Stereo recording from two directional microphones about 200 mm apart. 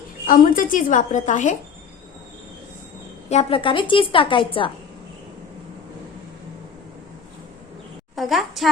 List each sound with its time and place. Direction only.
0.3 s a woman's voice: 45° left (ahead or behind)
3.2 s a woman's voice: 30° left (ahead or behind)
8.1 s a woman's voice: centre (ahead or behind)